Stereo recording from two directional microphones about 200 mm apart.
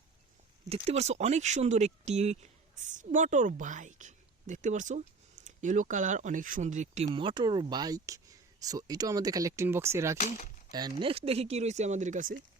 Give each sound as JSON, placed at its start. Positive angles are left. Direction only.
{"t": 0.9, "sound": "speech", "side_deg": -35}
{"t": 10.2, "sound": "speech", "side_deg": 35}
{"t": 10.7, "sound": "speech", "side_deg": -20}